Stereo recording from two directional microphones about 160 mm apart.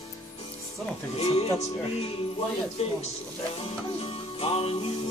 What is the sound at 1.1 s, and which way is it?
Music, 40° left (ahead or behind).